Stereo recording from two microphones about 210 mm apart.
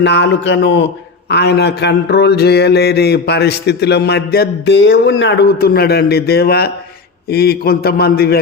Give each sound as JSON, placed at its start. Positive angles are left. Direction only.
{"t": 0.0, "sound": "speech", "side_deg": 55}
{"t": 1.3, "sound": "mantra", "side_deg": 50}